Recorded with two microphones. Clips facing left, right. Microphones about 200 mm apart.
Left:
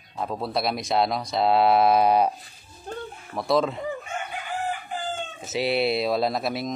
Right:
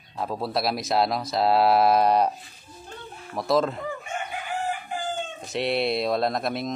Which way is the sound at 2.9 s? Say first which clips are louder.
Left 9 dB; 45° left (ahead or behind).